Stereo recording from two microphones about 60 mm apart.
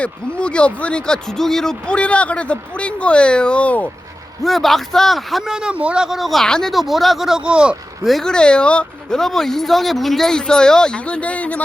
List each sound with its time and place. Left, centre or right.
0.0 s speech: centre
1.9 s speech: centre
4.4 s speech: centre
5.5 s speech: centre
6.1 s speech: centre
6.4 s speech: centre
7.4 s speech: centre
8.2 s speech: centre
9.1 s speech: centre; by 11.6 s left